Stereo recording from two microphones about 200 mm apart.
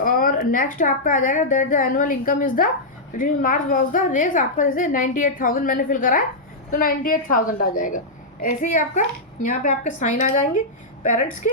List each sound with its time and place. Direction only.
0.0 s a woman's voice: 45° left (ahead or behind)